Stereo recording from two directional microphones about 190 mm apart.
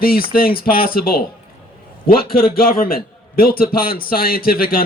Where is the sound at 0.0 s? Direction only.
50° left (ahead or behind).